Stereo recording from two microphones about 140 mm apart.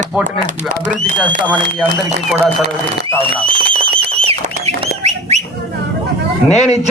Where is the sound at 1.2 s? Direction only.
10° left (ahead or behind).